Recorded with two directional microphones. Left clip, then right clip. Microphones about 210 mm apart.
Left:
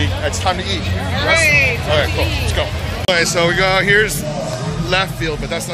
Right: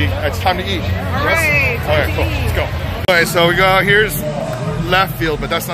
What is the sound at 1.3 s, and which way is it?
Speech, 30° right (ahead or behind).